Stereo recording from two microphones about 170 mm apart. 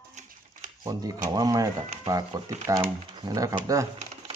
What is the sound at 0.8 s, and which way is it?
Speech, 20° right (ahead or behind).